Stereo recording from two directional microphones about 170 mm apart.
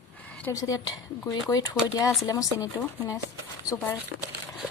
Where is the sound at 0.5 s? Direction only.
20° left (ahead or behind).